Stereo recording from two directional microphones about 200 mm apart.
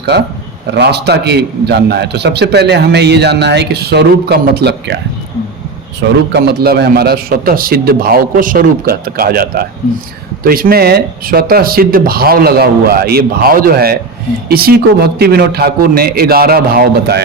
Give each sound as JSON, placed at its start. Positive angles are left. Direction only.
{"t": 0.1, "sound": "a man's voice", "side_deg": -55}
{"t": 6.3, "sound": "speech", "side_deg": -50}